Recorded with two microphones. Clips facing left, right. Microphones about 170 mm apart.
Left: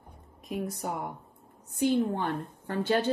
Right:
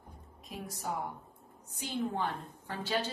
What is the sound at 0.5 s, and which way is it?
Speech, 55° left (ahead or behind).